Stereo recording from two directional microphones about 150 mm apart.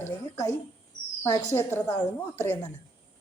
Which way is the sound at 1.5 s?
15° left (ahead or behind).